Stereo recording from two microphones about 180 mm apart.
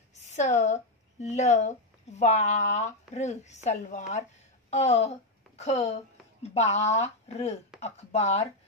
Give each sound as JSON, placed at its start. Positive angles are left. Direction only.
{"t": 0.3, "sound": "a woman's voice", "side_deg": 40}